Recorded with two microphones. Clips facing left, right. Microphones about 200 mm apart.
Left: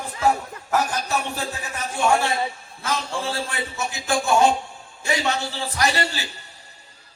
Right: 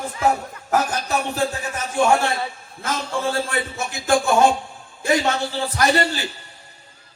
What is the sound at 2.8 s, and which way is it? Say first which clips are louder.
Speech: right 2 dB; 50° right (ahead or behind).